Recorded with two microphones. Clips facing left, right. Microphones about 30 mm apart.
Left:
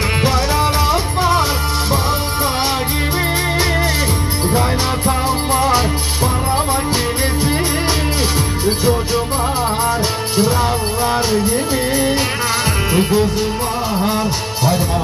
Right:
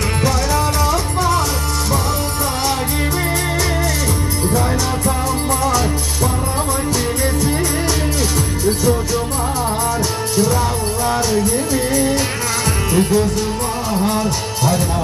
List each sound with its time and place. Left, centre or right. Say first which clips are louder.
4.5 s music: left 2 dB; left
8.6 s music: even; left
10.3 s music: left 1 dB; left